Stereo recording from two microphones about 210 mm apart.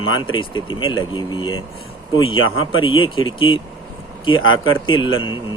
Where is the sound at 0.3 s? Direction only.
25° left (ahead or behind).